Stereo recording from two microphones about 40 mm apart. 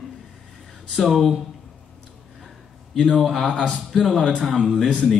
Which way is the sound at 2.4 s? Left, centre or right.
Centre.